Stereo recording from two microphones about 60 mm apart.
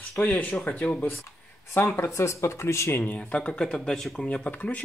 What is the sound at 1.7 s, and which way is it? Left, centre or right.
Speech, left.